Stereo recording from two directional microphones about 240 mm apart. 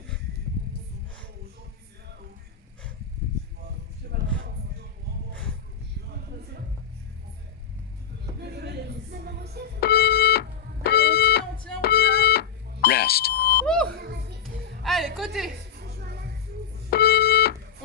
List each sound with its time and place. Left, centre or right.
4.1 s a sound: right
8.4 s music: right
9.8 s music: left
14.0 s music: right
14.8 s a sound: centre
15.7 s music: right
16.9 s smoke detector: left